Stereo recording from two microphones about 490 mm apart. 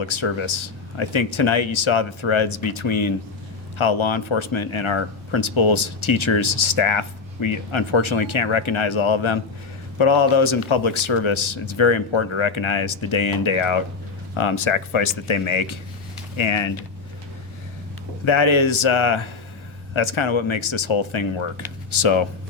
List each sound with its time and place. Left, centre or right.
0.0 s speech: left
18.3 s speech: left